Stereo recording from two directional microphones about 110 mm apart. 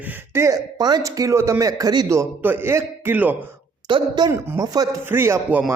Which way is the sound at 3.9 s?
40° right (ahead or behind).